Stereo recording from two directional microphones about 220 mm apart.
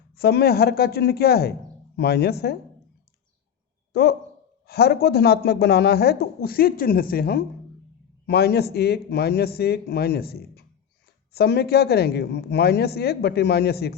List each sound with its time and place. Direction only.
0.2 s speech: 45° left (ahead or behind)
3.9 s speech: 45° left (ahead or behind)